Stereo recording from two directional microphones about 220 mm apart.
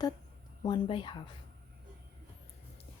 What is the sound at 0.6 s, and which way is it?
Speech, 20° left (ahead or behind).